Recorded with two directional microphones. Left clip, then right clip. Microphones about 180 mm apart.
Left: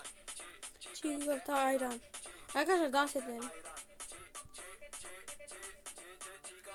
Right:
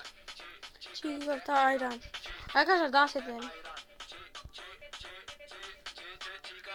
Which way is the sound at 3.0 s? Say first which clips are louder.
Right 4 dB; 30° left (ahead or behind).